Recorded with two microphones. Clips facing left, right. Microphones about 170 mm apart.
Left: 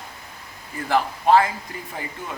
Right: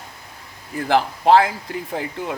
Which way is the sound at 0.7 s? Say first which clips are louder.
Right 3 dB; 75° right (ahead or behind).